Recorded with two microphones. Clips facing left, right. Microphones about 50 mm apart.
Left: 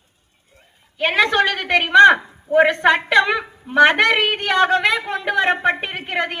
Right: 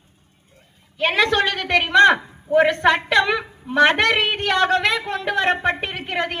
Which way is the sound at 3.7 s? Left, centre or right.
Left.